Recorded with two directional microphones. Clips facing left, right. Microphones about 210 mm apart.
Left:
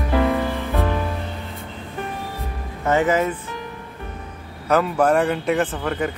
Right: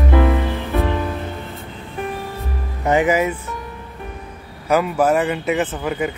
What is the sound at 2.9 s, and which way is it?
Speech, 15° right (ahead or behind).